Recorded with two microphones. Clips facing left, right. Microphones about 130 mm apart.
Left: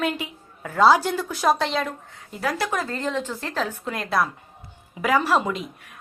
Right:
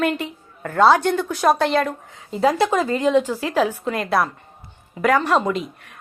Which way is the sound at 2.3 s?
25° right (ahead or behind).